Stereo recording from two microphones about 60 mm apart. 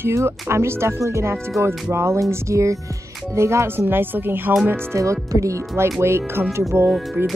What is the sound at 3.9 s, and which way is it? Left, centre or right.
Speech, right.